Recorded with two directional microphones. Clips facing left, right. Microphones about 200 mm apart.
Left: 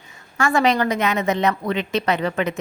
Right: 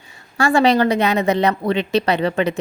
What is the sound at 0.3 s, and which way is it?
A woman's voice, 30° right (ahead or behind).